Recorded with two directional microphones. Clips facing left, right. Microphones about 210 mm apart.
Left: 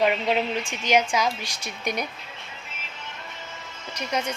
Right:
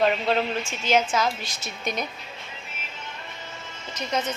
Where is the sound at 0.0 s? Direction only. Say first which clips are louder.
Even; 10° left (ahead or behind).